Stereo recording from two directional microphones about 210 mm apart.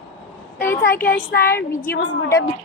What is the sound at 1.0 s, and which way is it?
Speech, 50° left (ahead or behind).